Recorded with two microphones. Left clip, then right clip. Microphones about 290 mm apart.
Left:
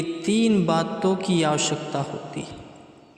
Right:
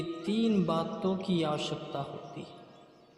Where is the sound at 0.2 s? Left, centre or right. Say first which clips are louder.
Left 9 dB; left.